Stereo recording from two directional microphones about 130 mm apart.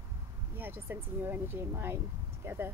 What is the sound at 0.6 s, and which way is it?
Speech, 15° right (ahead or behind).